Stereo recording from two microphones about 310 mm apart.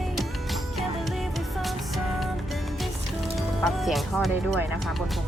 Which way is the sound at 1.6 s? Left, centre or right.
Centre.